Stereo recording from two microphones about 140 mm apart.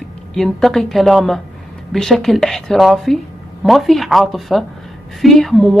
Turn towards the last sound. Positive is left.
turn(degrees=0)  # may be behind; listen again after turning